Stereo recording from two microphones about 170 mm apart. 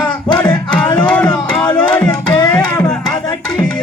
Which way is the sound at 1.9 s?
10° left (ahead or behind).